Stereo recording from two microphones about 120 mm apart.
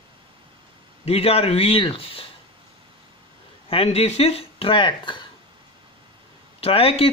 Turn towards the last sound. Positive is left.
turn(degrees=55)  # may be behind; listen again after turning